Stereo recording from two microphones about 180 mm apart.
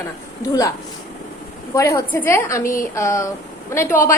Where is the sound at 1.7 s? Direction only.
15° left (ahead or behind).